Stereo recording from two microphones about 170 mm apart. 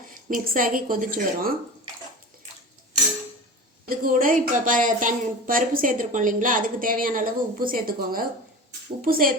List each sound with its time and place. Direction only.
0.3 s a woman's voice: 55° right (ahead or behind)
3.8 s a woman's voice: 55° right (ahead or behind)